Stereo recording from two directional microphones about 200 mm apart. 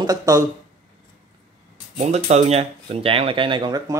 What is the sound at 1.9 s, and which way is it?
Speech, 35° right (ahead or behind).